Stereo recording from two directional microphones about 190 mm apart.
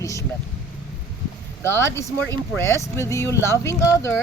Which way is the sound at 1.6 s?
15° left (ahead or behind).